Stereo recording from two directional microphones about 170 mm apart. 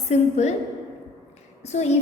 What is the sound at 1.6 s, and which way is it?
Speech, 40° left (ahead or behind).